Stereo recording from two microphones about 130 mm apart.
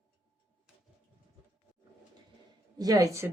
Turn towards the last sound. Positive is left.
turn(degrees=-25)  # may be behind; listen again after turning